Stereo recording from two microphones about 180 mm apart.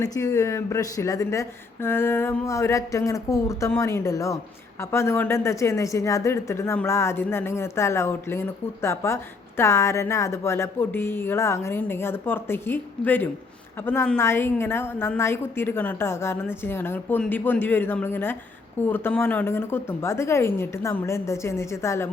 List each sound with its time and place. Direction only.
0.0 s a woman's voice: 15° left (ahead or behind)